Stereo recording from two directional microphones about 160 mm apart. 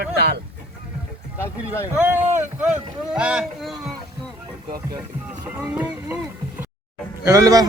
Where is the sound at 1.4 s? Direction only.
15° left (ahead or behind).